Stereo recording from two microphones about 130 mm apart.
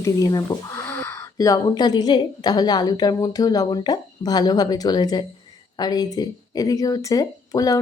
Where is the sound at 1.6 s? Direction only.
30° left (ahead or behind).